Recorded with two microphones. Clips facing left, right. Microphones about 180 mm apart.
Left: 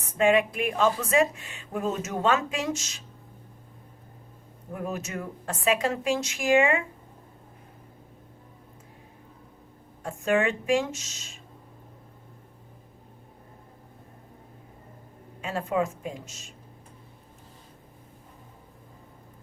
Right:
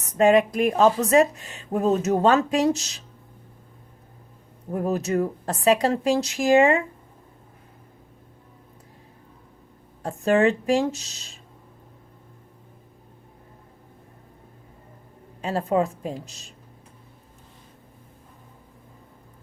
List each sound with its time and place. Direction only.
0.0 s speech: 40° right (ahead or behind)
4.7 s speech: 35° right (ahead or behind)
10.0 s speech: 35° right (ahead or behind)
15.4 s speech: 35° right (ahead or behind)